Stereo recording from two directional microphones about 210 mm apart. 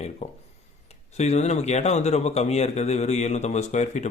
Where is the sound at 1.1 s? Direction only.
30° left (ahead or behind).